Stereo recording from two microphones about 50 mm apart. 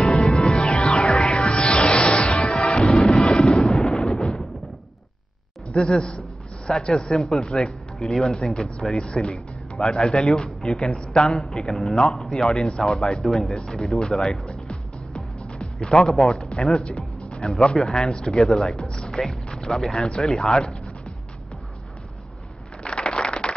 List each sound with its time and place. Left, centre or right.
0.0 s music: centre
5.7 s speech: centre
6.9 s speech: centre
8.5 s a man's voice: centre
14.4 s music: centre
15.9 s speech: centre
16.9 s music: centre
17.7 s a man's voice: centre
22.8 s a sound: centre